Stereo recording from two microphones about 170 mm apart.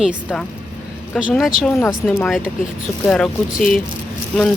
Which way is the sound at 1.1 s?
Centre (ahead or behind).